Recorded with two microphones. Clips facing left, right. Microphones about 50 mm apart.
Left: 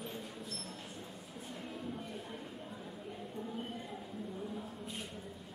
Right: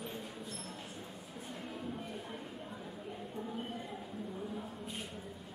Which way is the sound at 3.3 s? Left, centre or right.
Centre.